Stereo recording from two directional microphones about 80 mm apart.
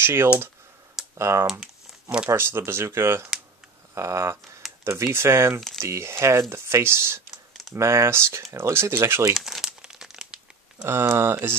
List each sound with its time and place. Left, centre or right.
0.0 s speech: right
1.5 s crumpling: centre
2.3 s speech: right
9.3 s crumpling: centre
10.9 s speech: right